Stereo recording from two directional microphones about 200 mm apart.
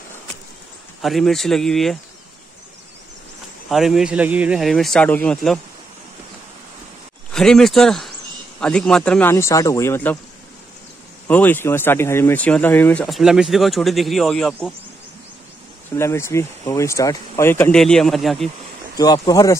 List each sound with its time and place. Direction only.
1.0 s speech: centre (ahead or behind)
3.6 s speech: centre (ahead or behind)
7.3 s speech: centre (ahead or behind)
11.2 s speech: 10° left (ahead or behind)
15.9 s speech: 15° left (ahead or behind)
18.9 s speech: 20° left (ahead or behind)